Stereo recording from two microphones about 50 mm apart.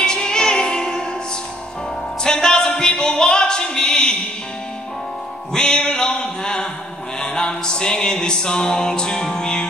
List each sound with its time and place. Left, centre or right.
0.0 s music: centre
2.2 s a sound: centre
5.5 s music: centre